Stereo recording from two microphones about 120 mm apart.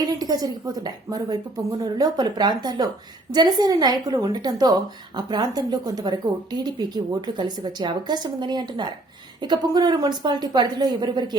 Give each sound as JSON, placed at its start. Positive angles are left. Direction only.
{"t": 0.2, "sound": "speech", "side_deg": -35}